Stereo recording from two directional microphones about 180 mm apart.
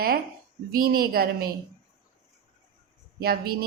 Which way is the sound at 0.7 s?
55° right (ahead or behind).